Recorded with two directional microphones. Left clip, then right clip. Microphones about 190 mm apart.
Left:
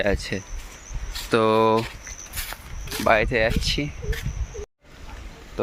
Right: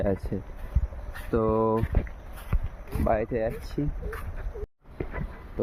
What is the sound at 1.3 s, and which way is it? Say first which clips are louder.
Speech: left 6 dB; 25° left (ahead or behind).